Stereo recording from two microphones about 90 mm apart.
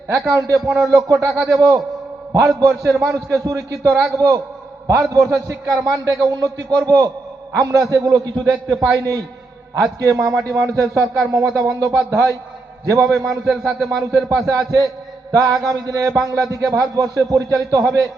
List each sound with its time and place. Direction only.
0.3 s a man's voice: 40° right (ahead or behind)